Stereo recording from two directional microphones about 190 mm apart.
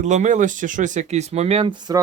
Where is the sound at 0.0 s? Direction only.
40° right (ahead or behind).